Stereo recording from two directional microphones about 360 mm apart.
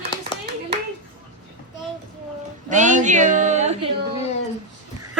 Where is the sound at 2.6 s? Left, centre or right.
Right.